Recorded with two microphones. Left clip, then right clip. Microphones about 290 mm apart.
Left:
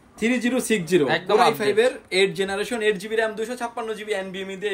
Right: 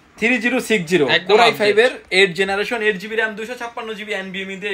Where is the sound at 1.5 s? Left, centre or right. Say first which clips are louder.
Right 5 dB; centre.